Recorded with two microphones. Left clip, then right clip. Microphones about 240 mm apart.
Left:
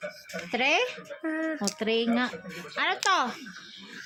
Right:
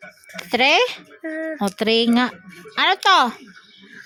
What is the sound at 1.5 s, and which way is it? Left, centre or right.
A woman's voice, right.